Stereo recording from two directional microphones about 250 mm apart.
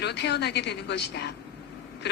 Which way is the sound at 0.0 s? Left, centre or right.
Left.